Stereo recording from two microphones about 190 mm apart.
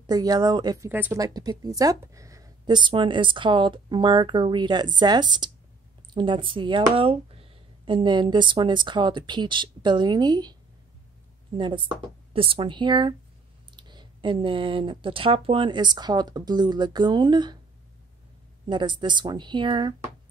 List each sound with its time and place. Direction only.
0.0 s speech: 20° right (ahead or behind)
11.5 s speech: 25° right (ahead or behind)
18.7 s speech: 25° right (ahead or behind)